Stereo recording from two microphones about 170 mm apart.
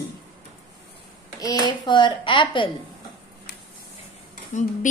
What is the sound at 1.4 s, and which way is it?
A child's voice, 25° left (ahead or behind).